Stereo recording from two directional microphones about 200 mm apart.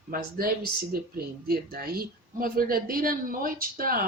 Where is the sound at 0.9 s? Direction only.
50° right (ahead or behind).